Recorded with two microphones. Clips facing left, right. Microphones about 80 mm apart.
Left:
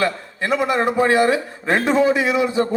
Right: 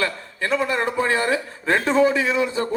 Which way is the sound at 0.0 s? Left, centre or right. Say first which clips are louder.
Left 3 dB; left.